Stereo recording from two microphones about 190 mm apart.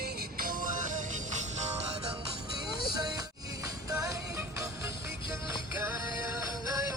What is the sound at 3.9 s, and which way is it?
Music, 15° right (ahead or behind).